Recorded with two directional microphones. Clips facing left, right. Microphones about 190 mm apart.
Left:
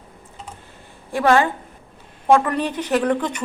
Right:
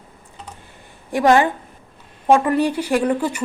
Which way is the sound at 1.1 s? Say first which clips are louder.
Right 2 dB; 15° right (ahead or behind).